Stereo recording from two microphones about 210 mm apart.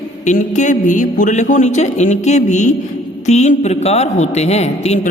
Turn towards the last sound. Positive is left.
turn(degrees=30)  # may be behind; listen again after turning